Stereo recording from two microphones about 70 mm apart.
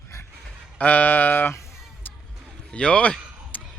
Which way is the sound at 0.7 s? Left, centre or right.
Left.